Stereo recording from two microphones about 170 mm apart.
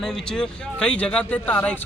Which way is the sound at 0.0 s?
5° left (ahead or behind).